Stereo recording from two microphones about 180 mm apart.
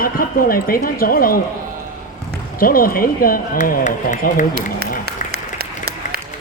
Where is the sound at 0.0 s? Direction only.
50° left (ahead or behind).